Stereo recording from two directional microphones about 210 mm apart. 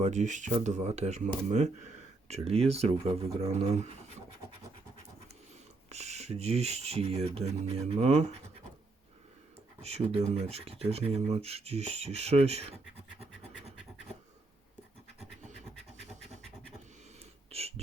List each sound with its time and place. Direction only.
0.0 s speech: 35° right (ahead or behind)
5.9 s speech: 30° right (ahead or behind)
9.8 s speech: 30° right (ahead or behind)
17.5 s a sound: 30° right (ahead or behind)